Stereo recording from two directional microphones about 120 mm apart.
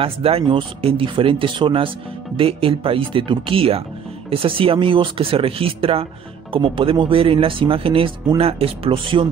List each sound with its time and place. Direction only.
0.0 s speech: 55° right (ahead or behind)